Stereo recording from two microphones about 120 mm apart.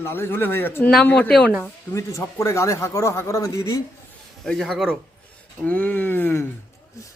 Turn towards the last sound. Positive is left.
turn(degrees=15)  # may be behind; listen again after turning